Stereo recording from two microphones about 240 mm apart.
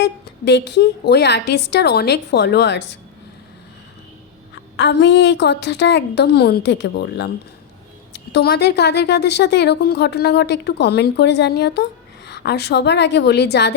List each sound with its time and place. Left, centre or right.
0.0 s a woman's voice: left
4.5 s a woman's voice: left
8.3 s a woman's voice: left